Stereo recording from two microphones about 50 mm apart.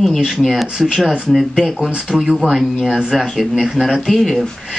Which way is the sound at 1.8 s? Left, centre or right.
Right.